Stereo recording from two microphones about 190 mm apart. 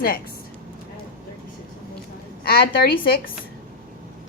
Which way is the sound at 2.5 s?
55° left (ahead or behind).